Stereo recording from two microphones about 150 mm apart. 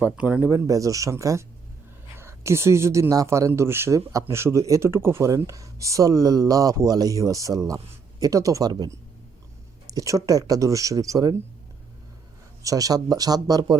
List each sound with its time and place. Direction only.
0.0 s speech: 10° right (ahead or behind)
12.6 s speech: 25° right (ahead or behind)